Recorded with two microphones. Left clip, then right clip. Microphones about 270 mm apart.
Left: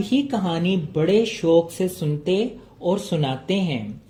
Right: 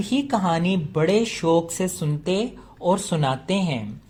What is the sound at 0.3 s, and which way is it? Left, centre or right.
A woman's voice, right.